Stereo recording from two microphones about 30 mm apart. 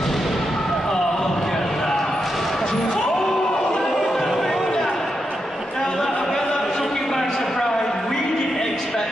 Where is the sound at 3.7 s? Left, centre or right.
Centre.